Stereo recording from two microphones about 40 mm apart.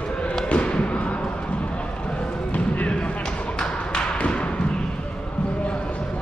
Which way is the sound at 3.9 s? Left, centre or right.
Left.